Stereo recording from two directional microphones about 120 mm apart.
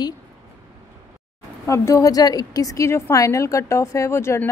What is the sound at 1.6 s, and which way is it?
Speech, 25° left (ahead or behind).